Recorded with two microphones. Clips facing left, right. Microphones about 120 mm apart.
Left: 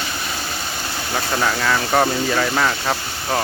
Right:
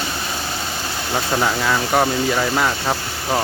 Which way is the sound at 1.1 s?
15° right (ahead or behind).